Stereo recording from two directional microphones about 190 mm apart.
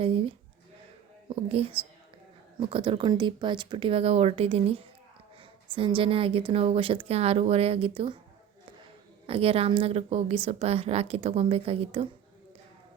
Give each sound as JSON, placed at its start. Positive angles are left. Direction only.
{"t": 0.0, "sound": "speech", "side_deg": -30}
{"t": 1.5, "sound": "speech", "side_deg": -30}
{"t": 9.2, "sound": "a woman's voice", "side_deg": -30}